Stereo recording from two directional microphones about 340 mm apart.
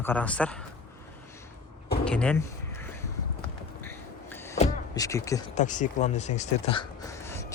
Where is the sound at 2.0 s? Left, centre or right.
Centre.